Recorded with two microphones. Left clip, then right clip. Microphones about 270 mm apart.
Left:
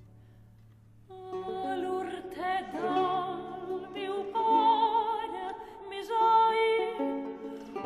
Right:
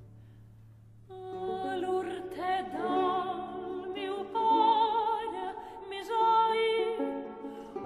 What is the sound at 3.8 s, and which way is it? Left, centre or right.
Music, centre.